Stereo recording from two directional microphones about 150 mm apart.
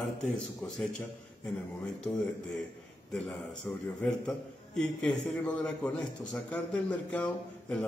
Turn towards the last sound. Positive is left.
turn(degrees=5)  # may be behind; listen again after turning